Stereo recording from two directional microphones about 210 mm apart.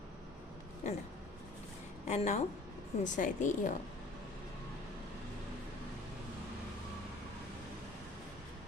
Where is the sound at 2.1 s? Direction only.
35° left (ahead or behind).